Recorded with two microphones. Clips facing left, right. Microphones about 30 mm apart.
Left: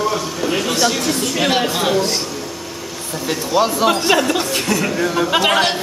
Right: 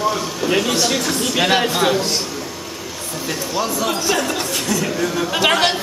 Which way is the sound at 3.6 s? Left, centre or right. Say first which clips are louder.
Left 6 dB; left.